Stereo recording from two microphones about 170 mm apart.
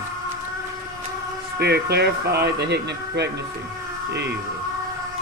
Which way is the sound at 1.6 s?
75° right (ahead or behind).